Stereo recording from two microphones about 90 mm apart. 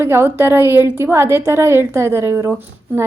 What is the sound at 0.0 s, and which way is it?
A woman's voice, 30° right (ahead or behind).